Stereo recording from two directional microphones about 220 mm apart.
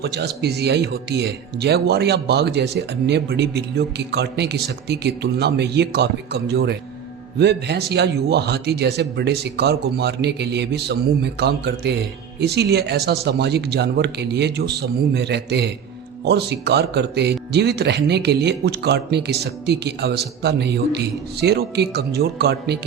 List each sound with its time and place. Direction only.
0.0 s a man's voice: 50° right (ahead or behind)